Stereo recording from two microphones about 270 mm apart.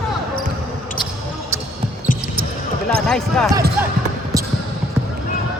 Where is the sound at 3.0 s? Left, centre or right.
Centre.